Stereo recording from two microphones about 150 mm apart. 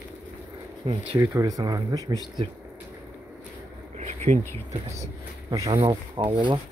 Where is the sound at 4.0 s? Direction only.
50° right (ahead or behind).